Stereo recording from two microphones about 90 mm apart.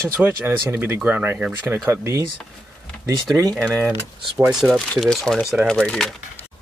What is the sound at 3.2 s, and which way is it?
Speech, 40° right (ahead or behind).